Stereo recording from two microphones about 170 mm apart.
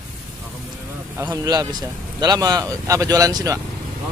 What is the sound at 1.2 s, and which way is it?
Speech, 20° right (ahead or behind).